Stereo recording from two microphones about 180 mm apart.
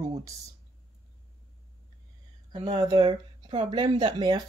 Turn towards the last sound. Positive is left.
turn(degrees=-25)  # may be behind; listen again after turning